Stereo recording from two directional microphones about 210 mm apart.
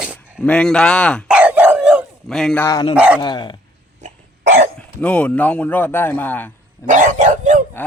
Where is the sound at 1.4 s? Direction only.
5° right (ahead or behind).